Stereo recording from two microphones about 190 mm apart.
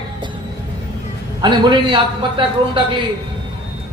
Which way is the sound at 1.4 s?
25° right (ahead or behind).